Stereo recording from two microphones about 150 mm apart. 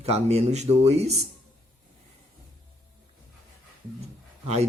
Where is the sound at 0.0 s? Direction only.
45° right (ahead or behind).